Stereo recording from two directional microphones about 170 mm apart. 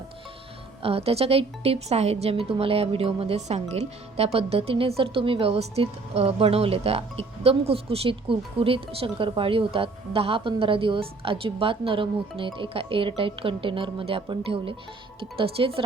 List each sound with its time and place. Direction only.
0.8 s a woman's voice: 35° right (ahead or behind)